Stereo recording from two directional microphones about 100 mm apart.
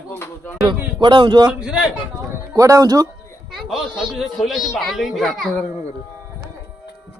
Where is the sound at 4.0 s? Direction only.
5° right (ahead or behind).